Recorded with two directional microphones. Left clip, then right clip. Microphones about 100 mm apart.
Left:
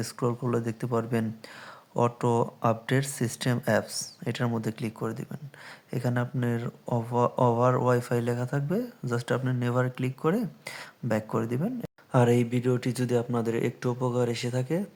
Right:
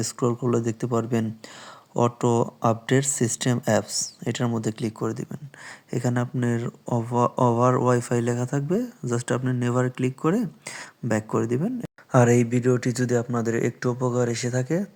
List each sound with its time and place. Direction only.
0.0 s speech: 20° right (ahead or behind)